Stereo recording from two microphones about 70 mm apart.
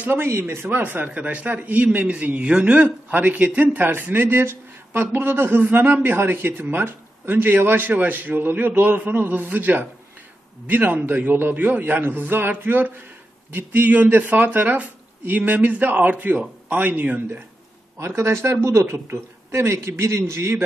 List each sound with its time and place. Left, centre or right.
0.0 s a man's voice: right
17.9 s speech: right